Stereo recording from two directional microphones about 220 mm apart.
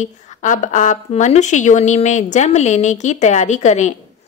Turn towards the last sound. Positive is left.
turn(degrees=30)  # may be behind; listen again after turning